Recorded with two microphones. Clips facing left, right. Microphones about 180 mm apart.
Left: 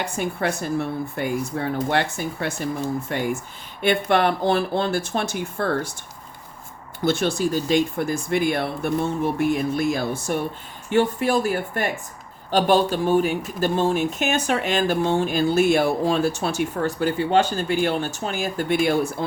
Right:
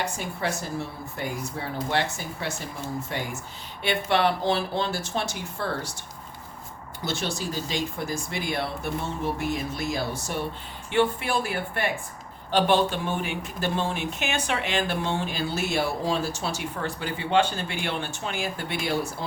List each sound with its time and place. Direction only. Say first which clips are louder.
0.0 s speech: left 5 dB; 60° left (ahead or behind)
7.0 s speech: left 9 dB; 55° left (ahead or behind)
10.8 s speech: left 4 dB; 40° left (ahead or behind)